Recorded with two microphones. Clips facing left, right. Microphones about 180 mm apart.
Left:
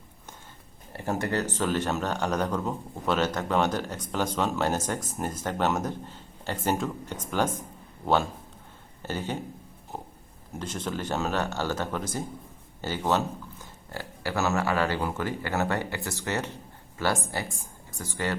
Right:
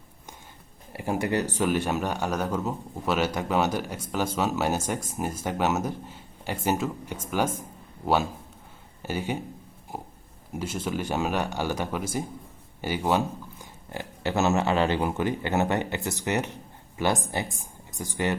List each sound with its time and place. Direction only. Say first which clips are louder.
0.9 s speech: right 2 dB; 10° right (ahead or behind)
9.9 s pig: right 1 dB; 10° right (ahead or behind)
10.5 s speech: right 3 dB; 10° right (ahead or behind)